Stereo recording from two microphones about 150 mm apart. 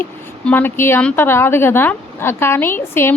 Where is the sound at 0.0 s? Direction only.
15° left (ahead or behind).